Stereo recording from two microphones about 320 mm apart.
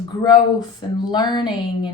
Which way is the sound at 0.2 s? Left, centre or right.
Centre.